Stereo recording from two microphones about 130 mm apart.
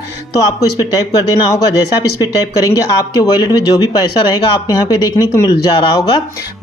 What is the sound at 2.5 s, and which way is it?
Speech, 30° left (ahead or behind).